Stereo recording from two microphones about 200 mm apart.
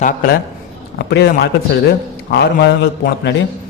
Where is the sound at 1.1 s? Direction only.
55° left (ahead or behind).